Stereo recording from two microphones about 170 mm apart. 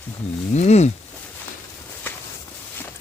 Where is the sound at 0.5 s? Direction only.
40° left (ahead or behind).